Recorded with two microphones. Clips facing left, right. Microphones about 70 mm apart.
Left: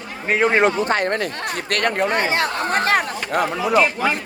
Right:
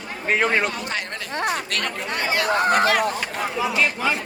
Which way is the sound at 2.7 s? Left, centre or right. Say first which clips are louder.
Left 1 dB; left.